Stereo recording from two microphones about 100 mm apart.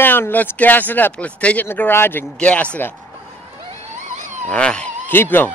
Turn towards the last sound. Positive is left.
turn(degrees=15)  # may be behind; listen again after turning